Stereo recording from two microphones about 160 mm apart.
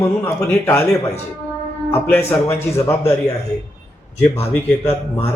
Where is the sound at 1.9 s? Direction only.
15° left (ahead or behind).